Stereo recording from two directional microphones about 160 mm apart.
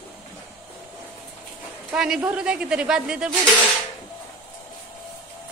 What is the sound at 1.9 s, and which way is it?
A man's voice, 5° right (ahead or behind).